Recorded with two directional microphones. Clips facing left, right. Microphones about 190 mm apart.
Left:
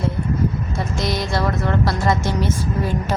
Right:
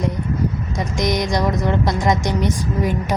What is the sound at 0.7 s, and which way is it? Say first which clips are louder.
A woman's voice: right 2 dB; 15° right (ahead or behind).